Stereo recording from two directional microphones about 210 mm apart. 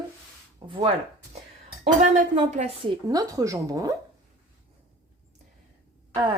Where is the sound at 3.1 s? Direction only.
15° right (ahead or behind).